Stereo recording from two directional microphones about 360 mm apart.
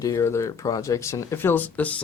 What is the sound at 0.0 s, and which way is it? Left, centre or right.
Speech, centre.